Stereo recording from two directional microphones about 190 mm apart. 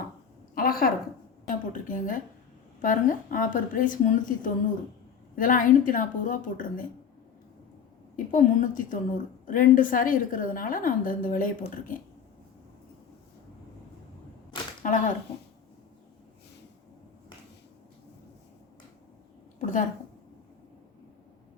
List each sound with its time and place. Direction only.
0.5 s a sound: 50° left (ahead or behind)
1.5 s a woman's voice: 45° left (ahead or behind)
8.1 s a woman's voice: 45° left (ahead or behind)
14.8 s a woman's voice: 40° left (ahead or behind)
19.5 s a woman's voice: 40° left (ahead or behind)